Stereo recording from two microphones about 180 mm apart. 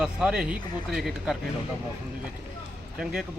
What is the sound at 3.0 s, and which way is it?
Speech, 5° right (ahead or behind).